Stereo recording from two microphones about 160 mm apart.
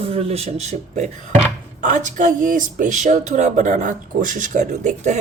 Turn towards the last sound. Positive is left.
turn(degrees=-50)  # may be behind; listen again after turning